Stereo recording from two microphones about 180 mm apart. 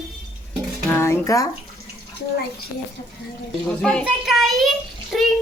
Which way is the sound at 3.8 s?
5° left (ahead or behind).